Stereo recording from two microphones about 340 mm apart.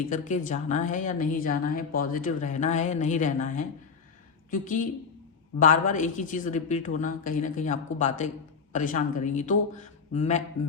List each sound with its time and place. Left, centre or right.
0.1 s a woman's voice: left